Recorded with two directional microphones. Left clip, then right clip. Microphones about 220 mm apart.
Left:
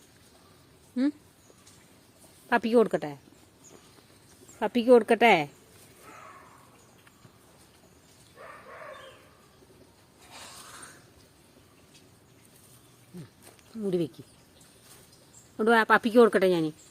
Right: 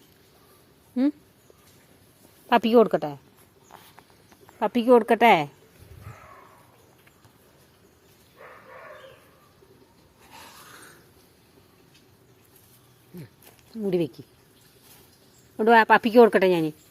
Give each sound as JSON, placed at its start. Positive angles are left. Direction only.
{"t": 0.9, "sound": "a woman's voice", "side_deg": -5}
{"t": 2.5, "sound": "a woman's voice", "side_deg": -15}
{"t": 4.6, "sound": "a woman's voice", "side_deg": -5}
{"t": 13.8, "sound": "a woman's voice", "side_deg": -15}
{"t": 15.5, "sound": "a woman's voice", "side_deg": -15}